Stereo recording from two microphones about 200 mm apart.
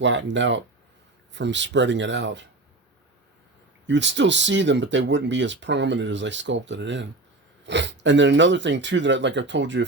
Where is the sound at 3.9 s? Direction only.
65° right (ahead or behind).